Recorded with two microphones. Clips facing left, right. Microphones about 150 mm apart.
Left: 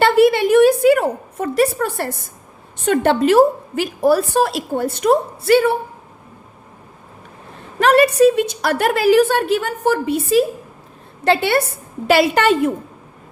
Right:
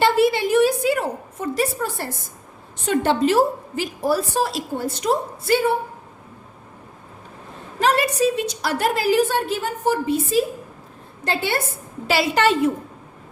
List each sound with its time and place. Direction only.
0.0 s a sound: 60° left (ahead or behind)
2.8 s a woman's voice: 60° left (ahead or behind)
7.8 s a woman's voice: 60° left (ahead or behind)
12.0 s a woman's voice: 55° left (ahead or behind)